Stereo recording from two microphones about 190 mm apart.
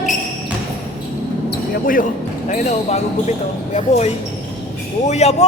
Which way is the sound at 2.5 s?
40° left (ahead or behind).